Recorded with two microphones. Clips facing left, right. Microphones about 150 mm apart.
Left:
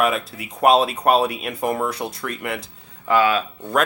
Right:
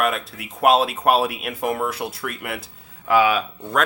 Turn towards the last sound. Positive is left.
turn(degrees=-10)  # may be behind; listen again after turning